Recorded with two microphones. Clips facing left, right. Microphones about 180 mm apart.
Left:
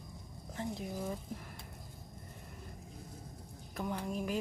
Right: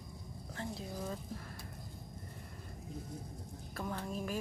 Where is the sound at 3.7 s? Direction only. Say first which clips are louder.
Left 3 dB; 15° left (ahead or behind).